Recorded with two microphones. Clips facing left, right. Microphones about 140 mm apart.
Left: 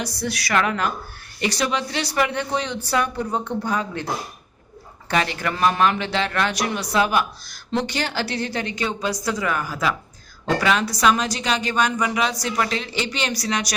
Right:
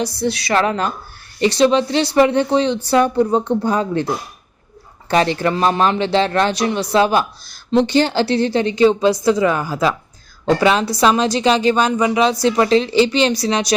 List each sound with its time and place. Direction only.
0.0 s a woman's voice: 25° right (ahead or behind)
5.0 s a woman's voice: 30° right (ahead or behind)